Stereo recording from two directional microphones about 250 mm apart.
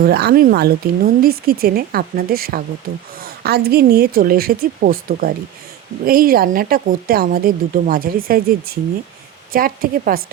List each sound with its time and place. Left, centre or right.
0.0 s speech: right